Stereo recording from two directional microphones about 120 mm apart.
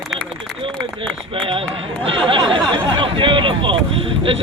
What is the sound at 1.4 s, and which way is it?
Speech, 50° right (ahead or behind).